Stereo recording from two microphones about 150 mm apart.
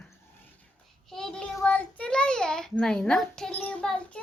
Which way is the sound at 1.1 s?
5° left (ahead or behind).